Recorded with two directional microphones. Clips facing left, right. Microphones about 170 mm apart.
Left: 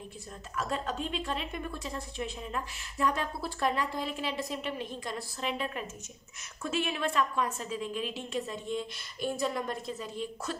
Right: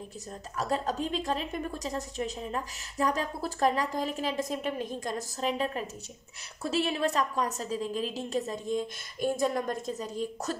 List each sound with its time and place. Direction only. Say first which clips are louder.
0.6 s a woman's voice: right 3 dB; 40° right (ahead or behind)